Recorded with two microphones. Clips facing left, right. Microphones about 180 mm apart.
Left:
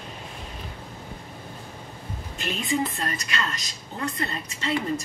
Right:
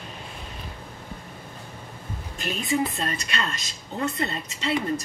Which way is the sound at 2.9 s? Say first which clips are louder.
Right 1 dB; 30° right (ahead or behind).